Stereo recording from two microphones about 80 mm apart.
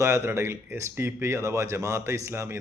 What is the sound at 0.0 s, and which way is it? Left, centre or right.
Speech, right.